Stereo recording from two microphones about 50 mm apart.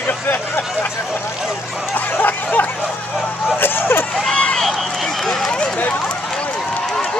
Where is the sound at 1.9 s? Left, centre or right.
Left.